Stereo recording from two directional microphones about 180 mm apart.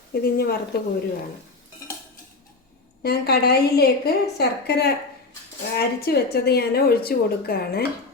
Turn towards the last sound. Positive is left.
turn(degrees=60)  # may be behind; listen again after turning